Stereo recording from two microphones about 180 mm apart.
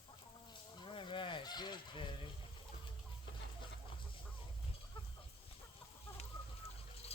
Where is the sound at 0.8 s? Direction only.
25° left (ahead or behind).